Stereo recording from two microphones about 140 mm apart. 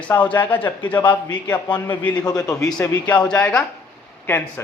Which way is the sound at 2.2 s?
25° left (ahead or behind).